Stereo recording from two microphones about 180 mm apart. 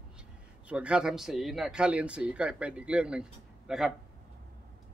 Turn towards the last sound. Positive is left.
turn(degrees=-5)  # may be behind; listen again after turning